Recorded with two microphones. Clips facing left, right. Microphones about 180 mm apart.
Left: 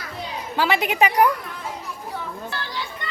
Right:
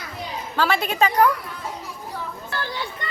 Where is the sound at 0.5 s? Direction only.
15° left (ahead or behind).